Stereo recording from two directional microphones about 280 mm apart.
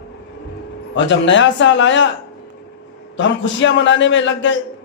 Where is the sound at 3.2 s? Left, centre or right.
Left.